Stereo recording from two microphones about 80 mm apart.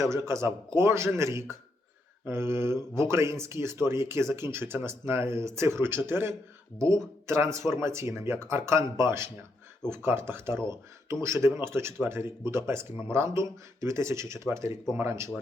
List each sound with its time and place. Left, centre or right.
0.0 s speech: right